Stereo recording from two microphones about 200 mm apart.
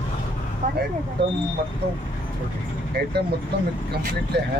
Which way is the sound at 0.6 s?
40° right (ahead or behind).